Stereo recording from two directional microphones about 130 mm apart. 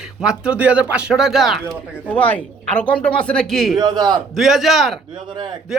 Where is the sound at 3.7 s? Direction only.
30° right (ahead or behind).